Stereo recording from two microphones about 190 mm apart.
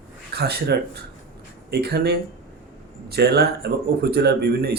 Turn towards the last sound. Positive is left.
turn(degrees=-55)  # may be behind; listen again after turning